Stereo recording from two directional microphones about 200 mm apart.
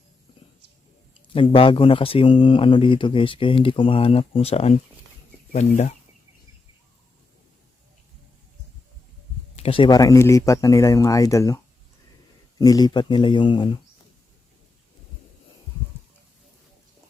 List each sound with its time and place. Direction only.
1.3 s speech: 25° left (ahead or behind)
9.6 s speech: 25° left (ahead or behind)